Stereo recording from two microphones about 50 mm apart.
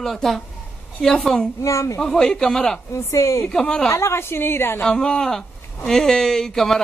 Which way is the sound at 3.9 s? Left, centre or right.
Left.